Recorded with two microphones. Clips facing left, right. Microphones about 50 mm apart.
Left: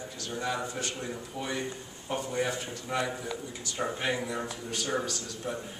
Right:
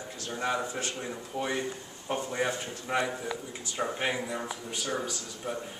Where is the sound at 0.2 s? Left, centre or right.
Right.